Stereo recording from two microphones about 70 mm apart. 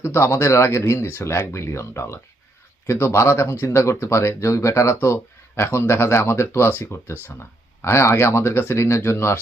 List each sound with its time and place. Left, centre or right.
0.0 s speech: left